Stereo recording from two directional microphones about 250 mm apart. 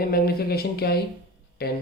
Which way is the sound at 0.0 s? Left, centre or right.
Left.